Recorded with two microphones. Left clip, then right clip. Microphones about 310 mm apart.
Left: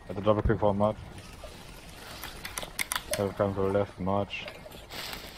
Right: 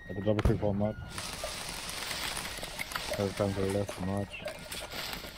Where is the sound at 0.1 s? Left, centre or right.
Left.